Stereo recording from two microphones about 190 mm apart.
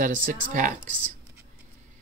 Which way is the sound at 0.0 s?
40° right (ahead or behind).